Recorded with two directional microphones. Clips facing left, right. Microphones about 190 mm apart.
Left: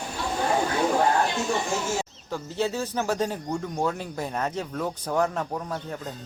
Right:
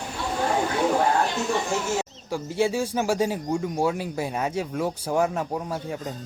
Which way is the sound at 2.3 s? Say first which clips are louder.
Right 4 dB; 10° right (ahead or behind).